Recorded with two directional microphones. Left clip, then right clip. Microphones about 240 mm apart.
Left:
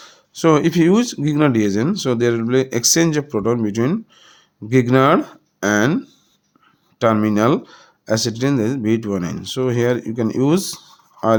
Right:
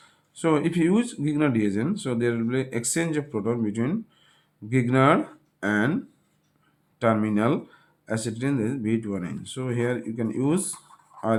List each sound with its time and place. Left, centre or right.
0.0 s speech: left
7.0 s speech: left
11.2 s dishes: centre